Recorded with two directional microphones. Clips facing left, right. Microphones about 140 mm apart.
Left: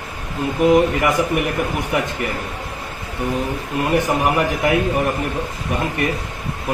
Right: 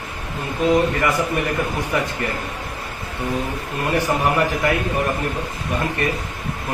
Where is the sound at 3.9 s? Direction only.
20° left (ahead or behind).